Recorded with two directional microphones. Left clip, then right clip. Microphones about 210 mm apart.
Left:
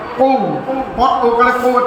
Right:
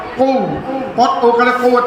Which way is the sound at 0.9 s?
55° right (ahead or behind).